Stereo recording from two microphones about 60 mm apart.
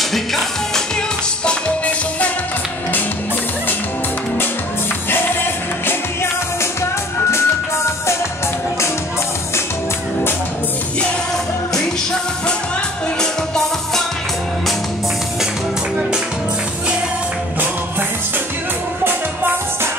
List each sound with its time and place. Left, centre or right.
0.0 s music: centre
1.4 s music: centre
5.1 s music: left
7.2 s music: left
11.7 s music: centre
19.0 s music: right